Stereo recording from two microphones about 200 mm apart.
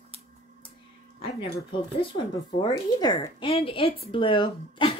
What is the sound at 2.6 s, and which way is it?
A woman's voice, 20° left (ahead or behind).